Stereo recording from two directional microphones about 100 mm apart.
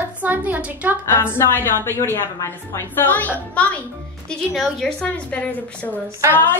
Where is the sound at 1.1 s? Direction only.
20° left (ahead or behind).